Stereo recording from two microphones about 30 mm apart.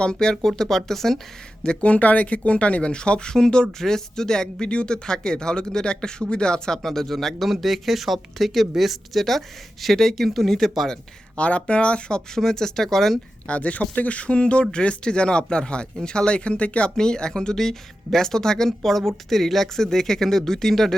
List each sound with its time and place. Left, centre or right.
0.0 s speech: left; by 1.2 s centre
1.8 s speech: left
2.9 s speech: left
3.8 s speech: centre
4.6 s speech: left
6.8 s speech: centre
9.8 s speech: centre
11.3 s speech: left
12.3 s speech: centre
13.5 s speech: left
14.7 s speech: left
17.0 s speech: left; by 20.9 s centre